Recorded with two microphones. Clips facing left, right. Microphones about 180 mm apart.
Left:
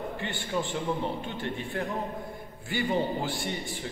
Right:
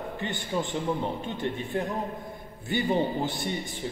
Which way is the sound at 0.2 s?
20° right (ahead or behind).